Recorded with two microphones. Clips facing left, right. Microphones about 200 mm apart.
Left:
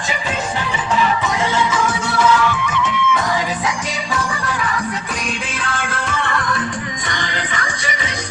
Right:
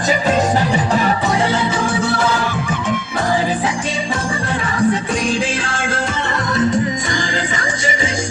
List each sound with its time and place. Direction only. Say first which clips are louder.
0.1 s music: right 8 dB; 40° right (ahead or behind)
4.1 s music: right 2 dB; 30° right (ahead or behind)